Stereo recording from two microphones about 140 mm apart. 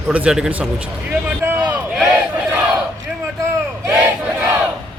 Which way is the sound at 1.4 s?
15° right (ahead or behind).